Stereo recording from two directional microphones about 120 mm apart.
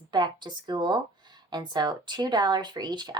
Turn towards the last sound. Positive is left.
turn(degrees=-35)  # may be behind; listen again after turning